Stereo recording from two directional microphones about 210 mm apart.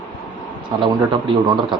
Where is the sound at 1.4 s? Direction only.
20° right (ahead or behind).